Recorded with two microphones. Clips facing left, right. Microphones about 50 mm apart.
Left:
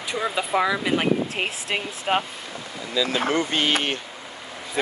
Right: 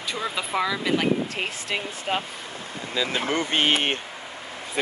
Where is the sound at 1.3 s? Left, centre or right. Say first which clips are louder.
Left 2 dB; left.